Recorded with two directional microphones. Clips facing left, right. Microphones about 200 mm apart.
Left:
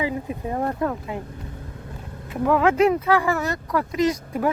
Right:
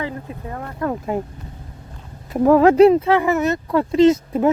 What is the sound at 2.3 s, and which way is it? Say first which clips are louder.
Speech: right 7 dB; 40° right (ahead or behind).